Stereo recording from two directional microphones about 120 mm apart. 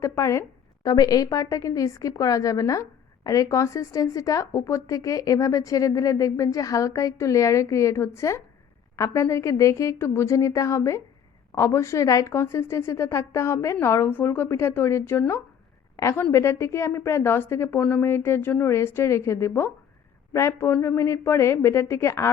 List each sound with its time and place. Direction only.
0.0 s a woman's voice: 25° left (ahead or behind)